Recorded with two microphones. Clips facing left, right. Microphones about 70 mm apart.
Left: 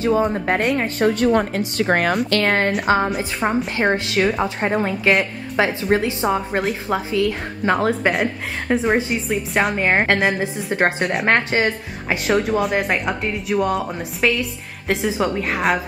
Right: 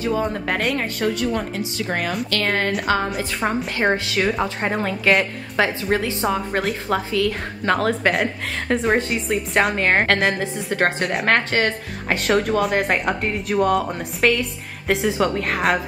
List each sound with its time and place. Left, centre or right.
0.9 s a woman's voice: left
2.3 s a woman's voice: left
3.1 s a woman's voice: centre
5.6 s a woman's voice: centre
6.6 s a woman's voice: centre
7.1 s a woman's voice: centre
8.1 s a woman's voice: centre
9.8 s a woman's voice: centre